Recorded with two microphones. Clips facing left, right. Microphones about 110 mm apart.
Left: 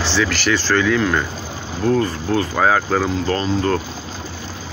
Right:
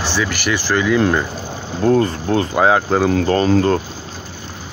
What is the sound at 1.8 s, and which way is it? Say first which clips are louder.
Speech: right 3 dB; 40° right (ahead or behind).